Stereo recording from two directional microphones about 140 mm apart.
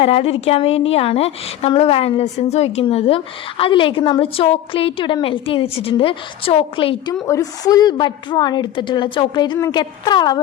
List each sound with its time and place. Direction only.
0.0 s a woman's voice: 45° left (ahead or behind)
7.3 s a woman's voice: 25° left (ahead or behind)